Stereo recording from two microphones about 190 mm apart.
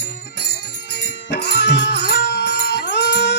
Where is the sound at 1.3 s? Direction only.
60° left (ahead or behind).